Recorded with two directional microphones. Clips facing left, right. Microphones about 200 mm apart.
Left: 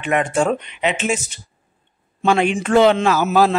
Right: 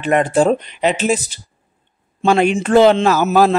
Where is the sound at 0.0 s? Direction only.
35° right (ahead or behind).